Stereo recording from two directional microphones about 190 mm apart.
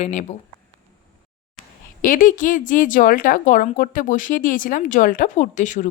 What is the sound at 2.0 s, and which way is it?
A woman's voice, 45° left (ahead or behind).